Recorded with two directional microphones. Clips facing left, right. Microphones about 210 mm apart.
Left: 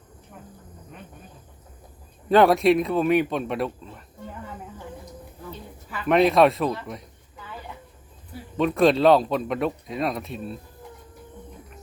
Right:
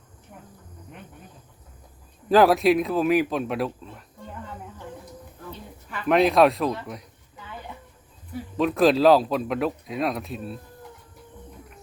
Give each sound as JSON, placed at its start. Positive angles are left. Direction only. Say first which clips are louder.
{"t": 2.3, "sound": "speech", "louder": "even", "side_deg": 0}
{"t": 5.9, "sound": "speech", "louder": "left 1 dB", "side_deg": 0}
{"t": 8.5, "sound": "speech", "louder": "even", "side_deg": 0}